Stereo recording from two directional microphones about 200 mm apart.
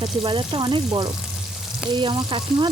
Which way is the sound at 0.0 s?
25° right (ahead or behind).